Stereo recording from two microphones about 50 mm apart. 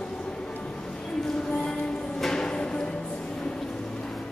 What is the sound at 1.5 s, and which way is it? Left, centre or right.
Music, centre.